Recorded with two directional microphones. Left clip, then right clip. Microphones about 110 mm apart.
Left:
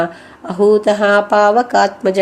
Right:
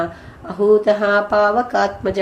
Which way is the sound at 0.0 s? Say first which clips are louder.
Left 5 dB; 35° left (ahead or behind).